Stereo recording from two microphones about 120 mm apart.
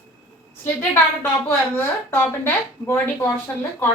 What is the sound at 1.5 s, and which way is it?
Speech, 20° left (ahead or behind).